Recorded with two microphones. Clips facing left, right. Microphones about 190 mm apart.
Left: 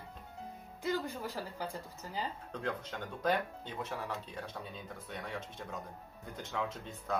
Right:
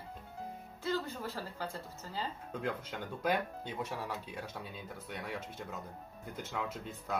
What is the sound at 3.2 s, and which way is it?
Speech, 10° right (ahead or behind).